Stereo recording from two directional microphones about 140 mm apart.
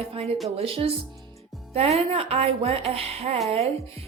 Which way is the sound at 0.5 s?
45° right (ahead or behind).